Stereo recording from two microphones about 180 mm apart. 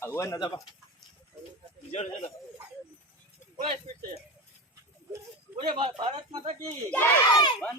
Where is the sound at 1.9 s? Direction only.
40° left (ahead or behind).